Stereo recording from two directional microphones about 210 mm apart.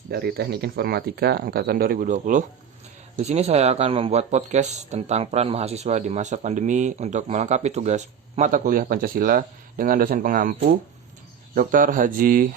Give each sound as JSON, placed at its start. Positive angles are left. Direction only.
{"t": 0.1, "sound": "speech", "side_deg": -50}
{"t": 11.5, "sound": "speech", "side_deg": -40}